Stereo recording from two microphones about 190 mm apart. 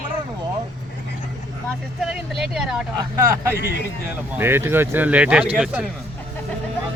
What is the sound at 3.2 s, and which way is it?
Speech, 15° right (ahead or behind).